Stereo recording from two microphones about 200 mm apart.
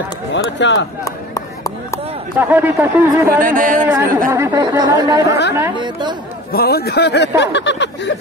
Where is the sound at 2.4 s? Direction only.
10° right (ahead or behind).